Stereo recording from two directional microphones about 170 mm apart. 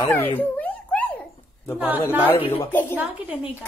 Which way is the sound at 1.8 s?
10° right (ahead or behind).